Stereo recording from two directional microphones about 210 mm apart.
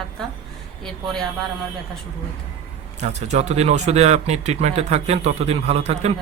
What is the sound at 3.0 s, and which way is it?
Speech, 30° right (ahead or behind).